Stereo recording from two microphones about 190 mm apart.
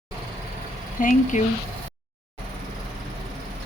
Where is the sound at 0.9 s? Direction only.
45° left (ahead or behind).